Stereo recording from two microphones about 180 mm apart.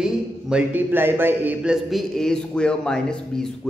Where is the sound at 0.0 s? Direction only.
5° right (ahead or behind).